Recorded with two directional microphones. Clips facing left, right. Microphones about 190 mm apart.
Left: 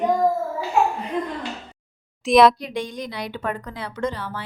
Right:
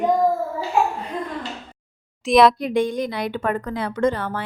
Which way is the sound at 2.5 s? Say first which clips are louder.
Right 8 dB; 50° right (ahead or behind).